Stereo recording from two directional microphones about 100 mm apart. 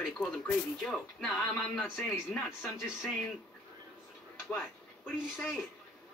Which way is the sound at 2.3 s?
20° left (ahead or behind).